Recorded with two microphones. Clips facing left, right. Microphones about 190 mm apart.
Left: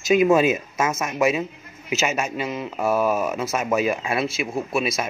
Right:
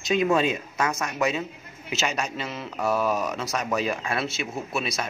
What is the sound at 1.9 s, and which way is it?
Speech, 5° left (ahead or behind).